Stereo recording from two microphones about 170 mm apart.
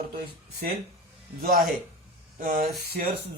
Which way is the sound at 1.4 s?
60° right (ahead or behind).